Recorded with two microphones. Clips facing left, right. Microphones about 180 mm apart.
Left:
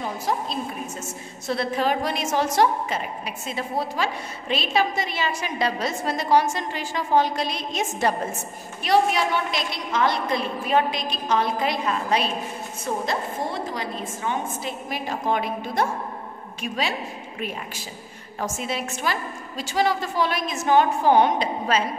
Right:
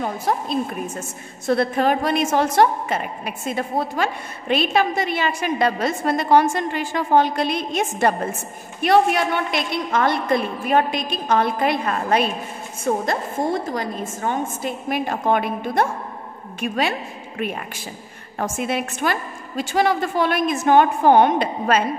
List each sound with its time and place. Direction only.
0.0 s a woman's voice: 55° right (ahead or behind)